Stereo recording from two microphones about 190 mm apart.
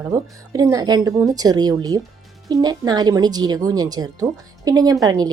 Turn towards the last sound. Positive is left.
turn(degrees=-20)  # may be behind; listen again after turning